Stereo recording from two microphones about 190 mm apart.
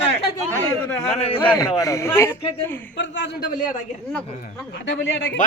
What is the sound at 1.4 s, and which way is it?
A man's voice, 15° left (ahead or behind).